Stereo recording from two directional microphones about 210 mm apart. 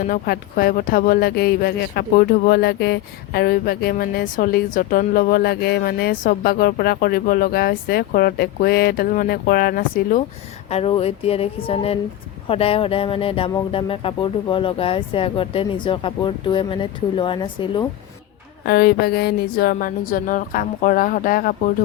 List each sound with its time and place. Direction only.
0.1 s speech: 45° left (ahead or behind)
10.7 s speech: 30° left (ahead or behind)
18.6 s speech: 50° left (ahead or behind)